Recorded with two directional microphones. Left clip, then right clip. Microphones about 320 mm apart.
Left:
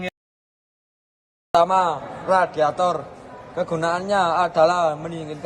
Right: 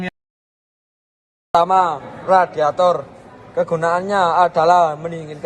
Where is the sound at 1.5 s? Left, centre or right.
Centre.